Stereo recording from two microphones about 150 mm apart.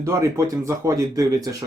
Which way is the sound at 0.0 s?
20° right (ahead or behind).